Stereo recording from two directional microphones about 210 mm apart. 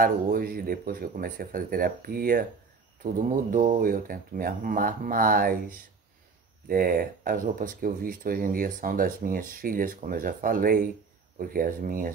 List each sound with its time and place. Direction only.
0.0 s speech: 45° right (ahead or behind)